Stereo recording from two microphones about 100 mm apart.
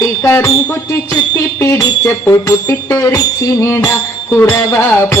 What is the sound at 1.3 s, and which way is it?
Music, 30° left (ahead or behind).